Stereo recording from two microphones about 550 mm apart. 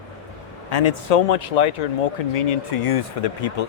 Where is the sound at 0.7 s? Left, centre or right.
Left.